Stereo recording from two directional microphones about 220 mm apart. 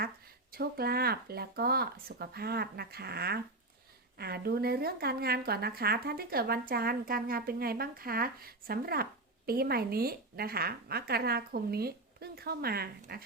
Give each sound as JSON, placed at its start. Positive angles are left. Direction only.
{"t": 0.5, "sound": "speech", "side_deg": -45}